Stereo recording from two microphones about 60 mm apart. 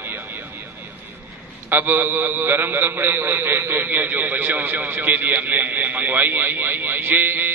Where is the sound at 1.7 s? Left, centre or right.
Right.